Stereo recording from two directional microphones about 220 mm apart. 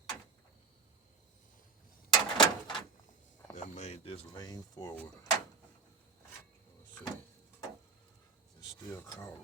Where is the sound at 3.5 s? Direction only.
30° left (ahead or behind); by 5.1 s 10° left (ahead or behind).